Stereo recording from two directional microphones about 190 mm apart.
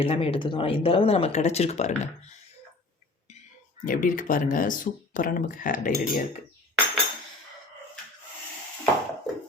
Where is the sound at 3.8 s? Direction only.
45° left (ahead or behind).